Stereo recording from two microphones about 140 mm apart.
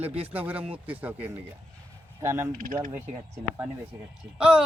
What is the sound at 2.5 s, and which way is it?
Speech, 75° right (ahead or behind).